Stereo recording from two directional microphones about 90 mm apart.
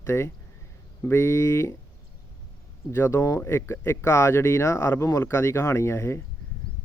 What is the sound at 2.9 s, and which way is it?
Speech, 30° left (ahead or behind).